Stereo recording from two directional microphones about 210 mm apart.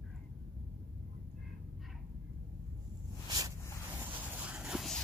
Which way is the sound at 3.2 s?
20° right (ahead or behind).